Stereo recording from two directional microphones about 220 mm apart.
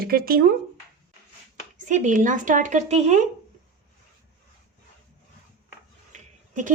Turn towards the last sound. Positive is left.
turn(degrees=-35)  # may be behind; listen again after turning